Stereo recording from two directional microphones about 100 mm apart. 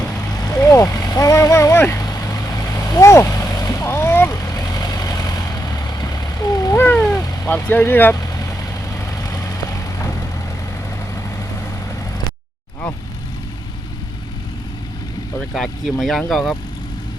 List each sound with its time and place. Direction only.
0.4 s vehicle: 30° left (ahead or behind)
6.7 s cat: 20° left (ahead or behind)
7.4 s speech: 20° left (ahead or behind)
8.2 s vehicle: 35° left (ahead or behind)
15.4 s speech: 5° left (ahead or behind)